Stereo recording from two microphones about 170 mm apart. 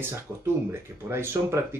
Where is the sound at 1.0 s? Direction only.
15° right (ahead or behind).